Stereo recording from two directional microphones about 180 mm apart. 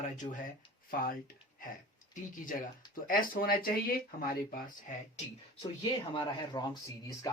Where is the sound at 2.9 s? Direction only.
50° left (ahead or behind).